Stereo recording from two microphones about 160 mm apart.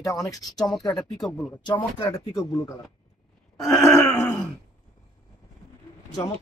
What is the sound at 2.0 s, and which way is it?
Speech, 15° left (ahead or behind).